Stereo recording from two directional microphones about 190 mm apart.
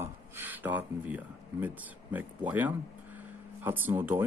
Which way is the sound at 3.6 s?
10° right (ahead or behind).